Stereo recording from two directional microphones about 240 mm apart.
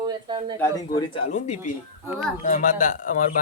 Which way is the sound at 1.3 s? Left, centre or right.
Left.